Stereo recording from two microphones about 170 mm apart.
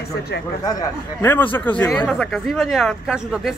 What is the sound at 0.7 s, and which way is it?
Speech, 15° left (ahead or behind).